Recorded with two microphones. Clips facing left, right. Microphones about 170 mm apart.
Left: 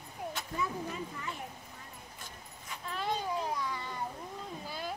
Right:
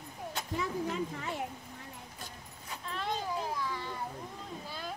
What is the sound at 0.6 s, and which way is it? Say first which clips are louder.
Speech: right 3 dB; 75° right (ahead or behind).